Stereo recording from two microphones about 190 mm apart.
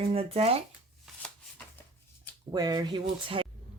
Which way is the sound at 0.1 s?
30° right (ahead or behind).